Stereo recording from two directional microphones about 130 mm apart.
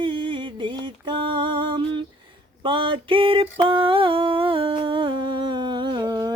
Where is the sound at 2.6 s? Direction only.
40° right (ahead or behind).